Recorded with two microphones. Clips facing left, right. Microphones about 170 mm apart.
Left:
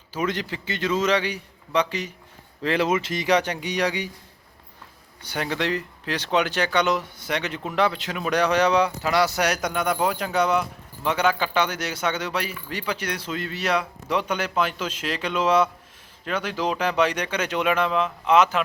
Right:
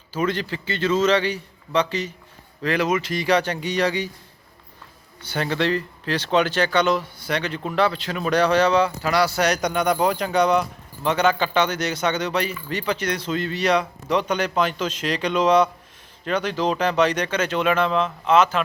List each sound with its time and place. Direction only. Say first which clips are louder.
0.1 s speech: right 3 dB; 15° left (ahead or behind)
2.6 s speech: right 1 dB; 25° left (ahead or behind)
5.2 s speech: right 3 dB; 15° left (ahead or behind)
9.5 s speech: right 3 dB; 5° left (ahead or behind)